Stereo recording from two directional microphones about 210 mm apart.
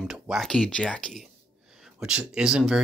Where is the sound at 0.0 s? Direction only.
Centre (ahead or behind).